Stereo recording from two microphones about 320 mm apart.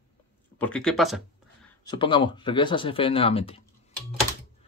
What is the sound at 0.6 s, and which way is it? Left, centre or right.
Speech, centre.